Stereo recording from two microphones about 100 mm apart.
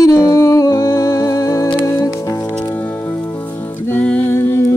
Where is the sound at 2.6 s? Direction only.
15° left (ahead or behind).